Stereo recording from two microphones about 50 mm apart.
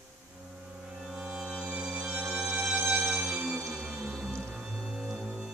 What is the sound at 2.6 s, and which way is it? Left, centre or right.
Music, right.